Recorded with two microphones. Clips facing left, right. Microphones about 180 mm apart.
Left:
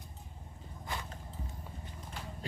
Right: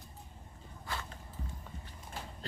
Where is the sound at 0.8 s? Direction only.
20° left (ahead or behind).